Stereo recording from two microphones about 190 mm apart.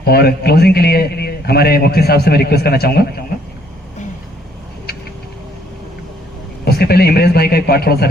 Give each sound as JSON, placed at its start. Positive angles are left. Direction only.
{"t": 0.0, "sound": "a man's voice", "side_deg": 55}
{"t": 6.7, "sound": "a man's voice", "side_deg": 55}